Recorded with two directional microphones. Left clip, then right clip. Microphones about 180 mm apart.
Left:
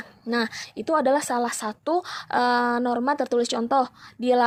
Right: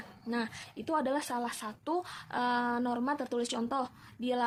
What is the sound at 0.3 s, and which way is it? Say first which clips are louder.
A woman's voice: left 11 dB; 50° left (ahead or behind).